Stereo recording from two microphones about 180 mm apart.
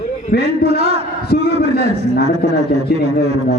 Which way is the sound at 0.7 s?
35° right (ahead or behind).